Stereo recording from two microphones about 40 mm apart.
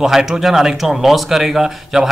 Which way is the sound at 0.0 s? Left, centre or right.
Centre.